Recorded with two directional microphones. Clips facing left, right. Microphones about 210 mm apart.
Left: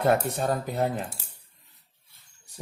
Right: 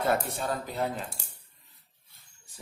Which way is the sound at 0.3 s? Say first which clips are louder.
Left 5 dB; 50° left (ahead or behind).